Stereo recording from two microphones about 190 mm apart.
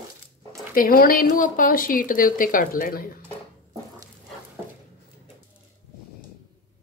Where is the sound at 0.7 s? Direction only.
50° left (ahead or behind).